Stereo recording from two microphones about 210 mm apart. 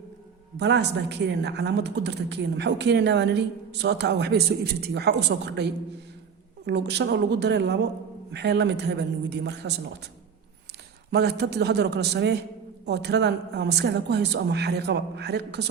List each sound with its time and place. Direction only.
0.5 s a woman's voice: 55° right (ahead or behind)
11.1 s a woman's voice: 50° right (ahead or behind)